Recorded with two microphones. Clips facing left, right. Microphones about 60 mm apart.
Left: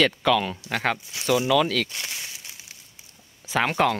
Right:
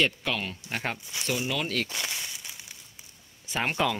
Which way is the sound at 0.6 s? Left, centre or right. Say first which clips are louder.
Left 7 dB; left.